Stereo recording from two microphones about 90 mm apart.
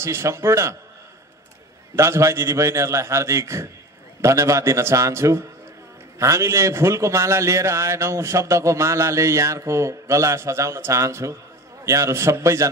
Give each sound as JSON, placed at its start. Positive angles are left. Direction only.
{"t": 0.0, "sound": "a man's voice", "side_deg": -30}
{"t": 2.0, "sound": "a man's voice", "side_deg": -35}